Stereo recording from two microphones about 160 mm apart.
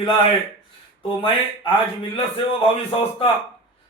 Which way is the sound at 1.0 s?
30° left (ahead or behind).